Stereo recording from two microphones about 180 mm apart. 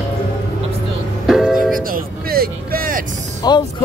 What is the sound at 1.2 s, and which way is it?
Music, centre (ahead or behind).